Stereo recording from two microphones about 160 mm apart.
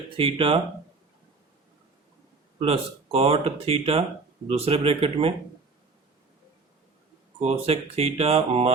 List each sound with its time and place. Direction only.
0.2 s speech: 35° right (ahead or behind)
2.6 s speech: 35° right (ahead or behind)
7.3 s speech: 40° right (ahead or behind)